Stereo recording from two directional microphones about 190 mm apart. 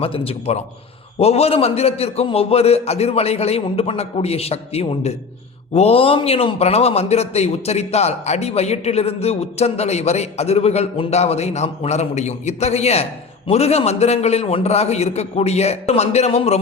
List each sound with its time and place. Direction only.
0.0 s a man's voice: 30° left (ahead or behind)